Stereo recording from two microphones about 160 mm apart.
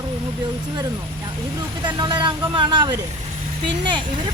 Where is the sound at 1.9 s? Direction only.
30° right (ahead or behind).